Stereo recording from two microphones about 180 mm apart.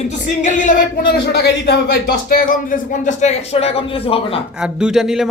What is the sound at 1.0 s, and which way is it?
Speech, 70° left (ahead or behind).